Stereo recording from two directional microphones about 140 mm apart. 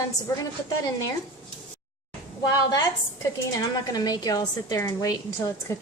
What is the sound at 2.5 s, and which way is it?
A woman's voice, 30° left (ahead or behind).